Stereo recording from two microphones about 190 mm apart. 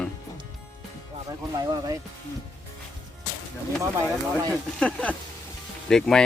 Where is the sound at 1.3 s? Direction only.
20° right (ahead or behind).